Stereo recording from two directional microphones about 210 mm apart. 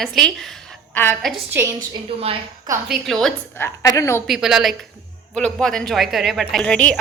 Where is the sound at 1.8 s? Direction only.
30° right (ahead or behind).